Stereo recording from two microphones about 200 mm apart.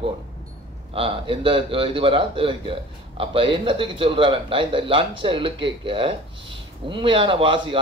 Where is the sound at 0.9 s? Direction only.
25° right (ahead or behind).